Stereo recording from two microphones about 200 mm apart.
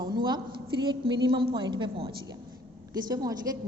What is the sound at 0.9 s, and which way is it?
A woman's voice, 25° right (ahead or behind).